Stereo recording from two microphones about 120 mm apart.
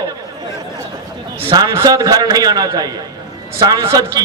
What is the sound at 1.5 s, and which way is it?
A man's voice, 30° right (ahead or behind).